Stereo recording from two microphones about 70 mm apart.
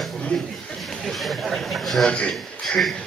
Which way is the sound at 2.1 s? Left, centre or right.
Centre.